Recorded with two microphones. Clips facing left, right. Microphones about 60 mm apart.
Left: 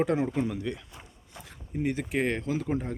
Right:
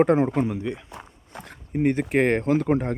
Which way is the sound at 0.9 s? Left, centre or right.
Right.